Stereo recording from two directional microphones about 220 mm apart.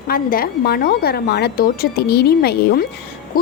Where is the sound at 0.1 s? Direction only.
40° left (ahead or behind).